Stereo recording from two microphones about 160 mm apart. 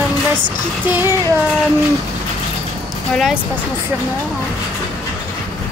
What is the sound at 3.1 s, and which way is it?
Speech, centre (ahead or behind).